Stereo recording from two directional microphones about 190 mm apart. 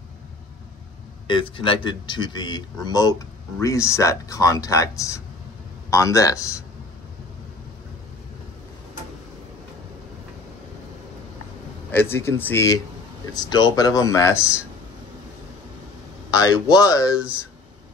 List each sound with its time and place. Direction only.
1.2 s speech: 25° left (ahead or behind)
11.9 s speech: 10° left (ahead or behind)
16.3 s speech: 20° left (ahead or behind)